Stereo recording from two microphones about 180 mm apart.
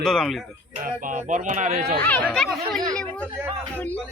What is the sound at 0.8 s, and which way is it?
Speech, 45° right (ahead or behind).